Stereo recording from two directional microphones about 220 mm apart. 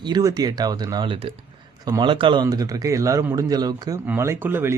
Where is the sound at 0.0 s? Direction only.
15° right (ahead or behind).